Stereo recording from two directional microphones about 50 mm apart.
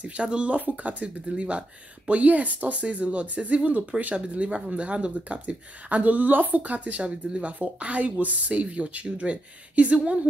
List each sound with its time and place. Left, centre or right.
0.0 s speech: right